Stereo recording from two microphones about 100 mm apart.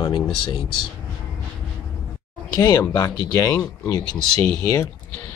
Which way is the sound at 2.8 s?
25° left (ahead or behind).